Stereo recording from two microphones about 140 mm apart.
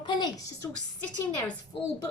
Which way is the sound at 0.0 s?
30° left (ahead or behind).